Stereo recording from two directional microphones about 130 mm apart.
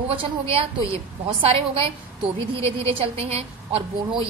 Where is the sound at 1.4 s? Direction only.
45° right (ahead or behind).